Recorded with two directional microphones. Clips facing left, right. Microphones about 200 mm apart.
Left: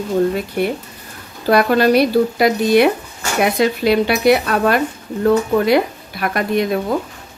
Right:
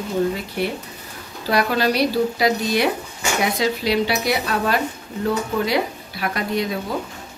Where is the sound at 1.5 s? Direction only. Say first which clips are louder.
Left 7 dB; 55° left (ahead or behind).